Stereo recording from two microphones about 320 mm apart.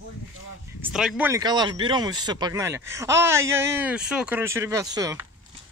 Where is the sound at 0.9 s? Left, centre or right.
Centre.